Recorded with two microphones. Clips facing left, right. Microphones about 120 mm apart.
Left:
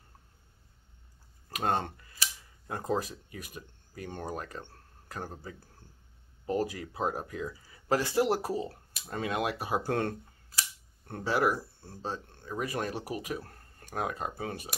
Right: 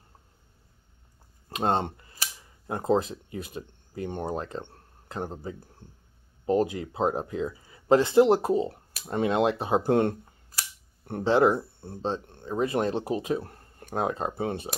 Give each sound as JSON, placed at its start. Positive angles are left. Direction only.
{"t": 1.5, "sound": "speech", "side_deg": -25}